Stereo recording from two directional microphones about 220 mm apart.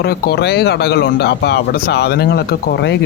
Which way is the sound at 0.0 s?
45° left (ahead or behind).